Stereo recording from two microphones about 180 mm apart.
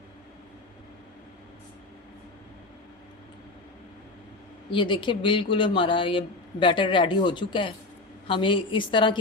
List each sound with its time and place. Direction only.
4.7 s speech: 25° left (ahead or behind)